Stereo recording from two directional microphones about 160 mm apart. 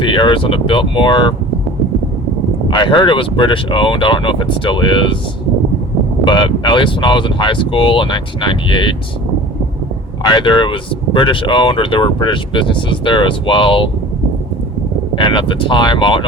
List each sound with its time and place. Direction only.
0.0 s speech: 30° left (ahead or behind)
2.6 s speech: 30° left (ahead or behind)
6.2 s speech: 30° left (ahead or behind)
10.2 s speech: 30° left (ahead or behind)
15.1 s speech: 30° left (ahead or behind)